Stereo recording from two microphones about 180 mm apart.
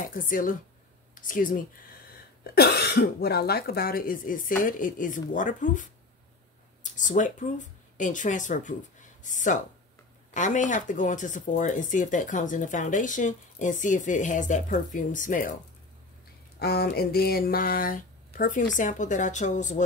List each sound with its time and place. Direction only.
0.1 s speech: 50° left (ahead or behind)
2.5 s speech: 60° left (ahead or behind)
16.5 s speech: 60° left (ahead or behind); by 19.8 s 45° left (ahead or behind)